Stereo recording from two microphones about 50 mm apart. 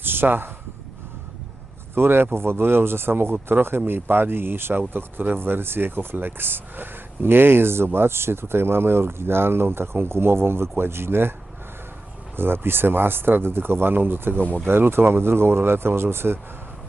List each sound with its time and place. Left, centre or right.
0.0 s a sound: right
2.0 s speech: right
12.4 s speech: right